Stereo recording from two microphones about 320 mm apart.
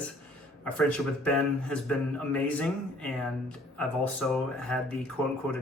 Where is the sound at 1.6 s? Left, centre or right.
Centre.